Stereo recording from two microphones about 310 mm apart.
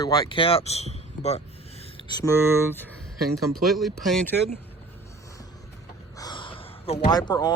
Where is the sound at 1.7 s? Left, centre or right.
Centre.